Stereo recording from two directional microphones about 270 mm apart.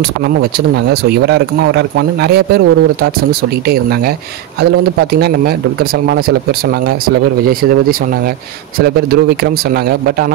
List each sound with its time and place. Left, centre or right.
1.2 s speech: right
8.7 s speech: right